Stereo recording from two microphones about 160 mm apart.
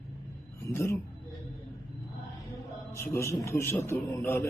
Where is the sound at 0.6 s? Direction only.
15° left (ahead or behind).